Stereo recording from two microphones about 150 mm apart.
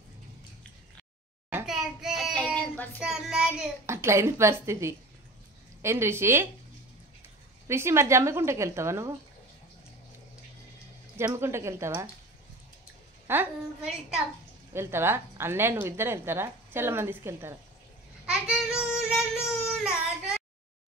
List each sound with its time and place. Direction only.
1.7 s child singing: 5° right (ahead or behind)
3.0 s child singing: 5° right (ahead or behind)
3.8 s a woman's voice: 20° right (ahead or behind)
7.6 s a woman's voice: 15° right (ahead or behind)
11.1 s a woman's voice: 15° right (ahead or behind)
13.3 s a woman's voice: 15° right (ahead or behind)
14.7 s a woman's voice: 15° right (ahead or behind)
18.2 s child singing: 5° right (ahead or behind)